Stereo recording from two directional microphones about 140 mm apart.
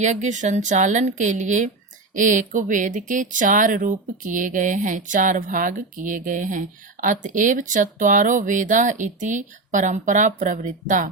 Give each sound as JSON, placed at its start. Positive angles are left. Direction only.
{"t": 0.0, "sound": "speech", "side_deg": -60}